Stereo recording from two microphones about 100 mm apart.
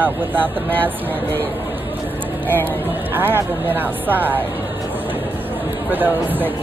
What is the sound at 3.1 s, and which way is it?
Speech, 20° right (ahead or behind).